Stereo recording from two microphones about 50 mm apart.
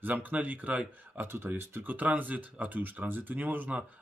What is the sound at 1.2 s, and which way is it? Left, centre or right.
Speech, right.